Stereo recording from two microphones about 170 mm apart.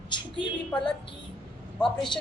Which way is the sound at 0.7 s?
5° left (ahead or behind).